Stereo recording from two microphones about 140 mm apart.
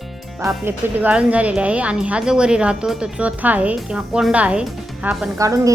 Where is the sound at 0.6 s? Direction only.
15° right (ahead or behind).